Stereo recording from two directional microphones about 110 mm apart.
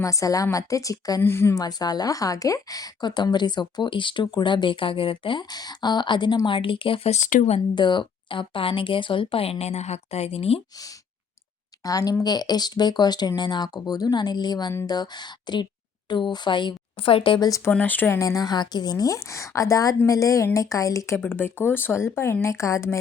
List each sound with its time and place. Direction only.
0.0 s speech: 30° left (ahead or behind)
1.2 s speech: 20° left (ahead or behind)
1.6 s a woman's voice: 40° left (ahead or behind); by 7.1 s 55° left (ahead or behind)
7.1 s speech: 85° left
7.8 s speech: 45° left (ahead or behind); by 10.6 s 65° left (ahead or behind)
11.8 s a woman's voice: 35° left (ahead or behind); by 17.5 s 50° left (ahead or behind)
17.7 s speech: 15° left (ahead or behind)
18.2 s speech: 30° left (ahead or behind)
21.2 s speech: 20° left (ahead or behind)